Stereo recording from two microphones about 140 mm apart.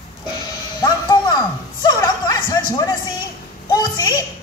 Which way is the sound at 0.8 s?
30° left (ahead or behind).